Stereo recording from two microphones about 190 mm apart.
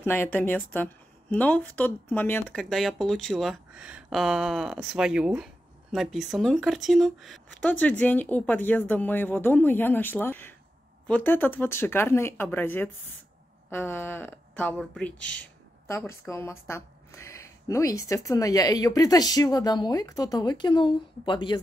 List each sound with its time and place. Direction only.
0.0 s a woman's voice: 10° left (ahead or behind); by 21.5 s 25° left (ahead or behind)